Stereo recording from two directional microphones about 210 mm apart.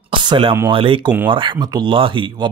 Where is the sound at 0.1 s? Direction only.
25° right (ahead or behind).